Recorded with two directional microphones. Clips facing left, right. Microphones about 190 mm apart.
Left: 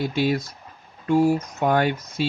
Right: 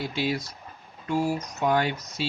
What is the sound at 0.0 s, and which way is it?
Speech, 50° left (ahead or behind).